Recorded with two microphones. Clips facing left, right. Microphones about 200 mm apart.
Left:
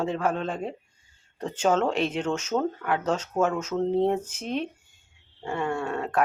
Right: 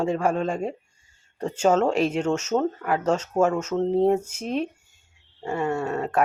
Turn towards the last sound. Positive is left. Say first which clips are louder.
# right 3 dB
turn(degrees=-5)  # may be behind; listen again after turning